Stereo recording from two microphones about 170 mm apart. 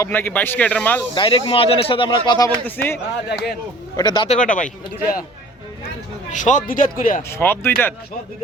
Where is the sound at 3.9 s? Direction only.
25° left (ahead or behind).